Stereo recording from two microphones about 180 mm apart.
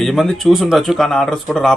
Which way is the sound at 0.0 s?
Centre (ahead or behind).